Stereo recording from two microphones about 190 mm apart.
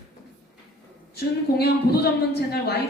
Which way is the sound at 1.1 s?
55° left (ahead or behind).